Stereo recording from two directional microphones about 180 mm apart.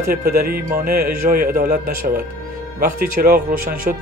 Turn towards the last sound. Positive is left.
turn(degrees=-45)  # may be behind; listen again after turning